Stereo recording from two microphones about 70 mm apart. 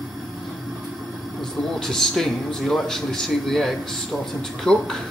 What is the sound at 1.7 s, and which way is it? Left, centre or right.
A man's voice, centre.